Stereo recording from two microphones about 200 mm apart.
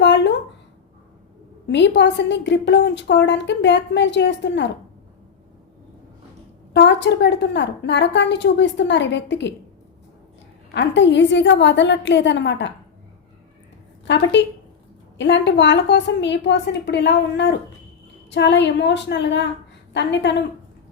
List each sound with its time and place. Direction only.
0.0 s a sound: 60° left (ahead or behind)
1.6 s a woman's voice: 60° left (ahead or behind)
6.7 s a woman's voice: 60° left (ahead or behind)
10.8 s a woman's voice: 60° left (ahead or behind)
14.1 s a woman's voice: 65° left (ahead or behind)